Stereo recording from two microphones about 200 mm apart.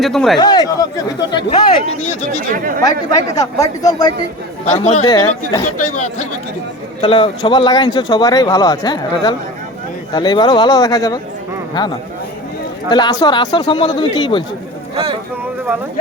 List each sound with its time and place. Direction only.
0.0 s a man's voice: centre (ahead or behind)
0.3 s speech: 20° left (ahead or behind)
2.5 s speech: 45° right (ahead or behind)
2.8 s speech: 20° left (ahead or behind)
4.6 s speech: 35° left (ahead or behind)
5.0 s speech: 20° left (ahead or behind)
5.9 s speech: 35° left (ahead or behind)
7.0 s speech: 25° left (ahead or behind)
14.9 s speech: 25° right (ahead or behind)